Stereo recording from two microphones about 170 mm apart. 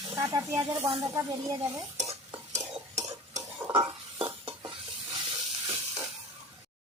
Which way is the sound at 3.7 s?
30° right (ahead or behind).